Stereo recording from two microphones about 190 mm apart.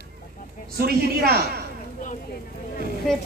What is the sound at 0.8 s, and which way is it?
Speech, 55° right (ahead or behind).